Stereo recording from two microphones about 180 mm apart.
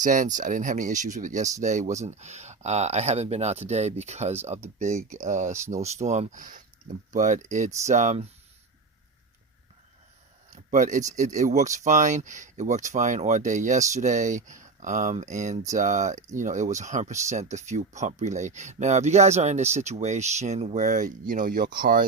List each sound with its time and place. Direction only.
0.0 s speech: 45° right (ahead or behind)
10.5 s speech: 45° right (ahead or behind)